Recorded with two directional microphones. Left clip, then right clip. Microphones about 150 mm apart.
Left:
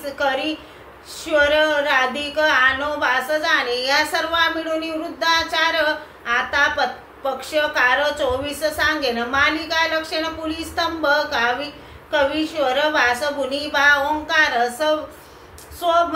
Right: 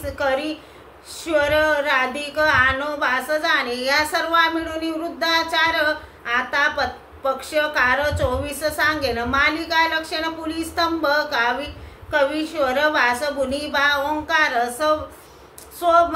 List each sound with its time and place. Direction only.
0.0 s a woman's voice: 30° right (ahead or behind)
1.2 s child singing: 30° right (ahead or behind)